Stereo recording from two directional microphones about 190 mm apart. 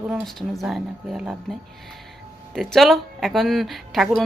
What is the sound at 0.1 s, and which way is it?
Speech, centre (ahead or behind).